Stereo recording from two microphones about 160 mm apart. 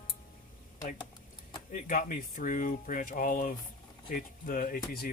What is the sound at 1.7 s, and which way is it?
Speech, 55° left (ahead or behind).